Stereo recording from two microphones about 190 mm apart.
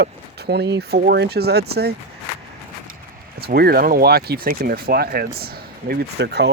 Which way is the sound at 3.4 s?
55° right (ahead or behind).